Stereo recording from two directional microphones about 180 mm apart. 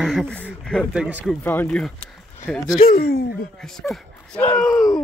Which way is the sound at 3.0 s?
60° left (ahead or behind).